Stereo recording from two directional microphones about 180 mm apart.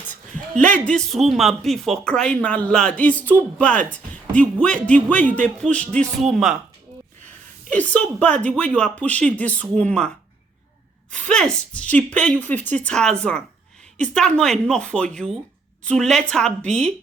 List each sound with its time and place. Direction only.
0.3 s speech: 45° right (ahead or behind)
0.9 s speech: centre (ahead or behind)
7.7 s speech: 10° left (ahead or behind)
11.1 s speech: 5° left (ahead or behind)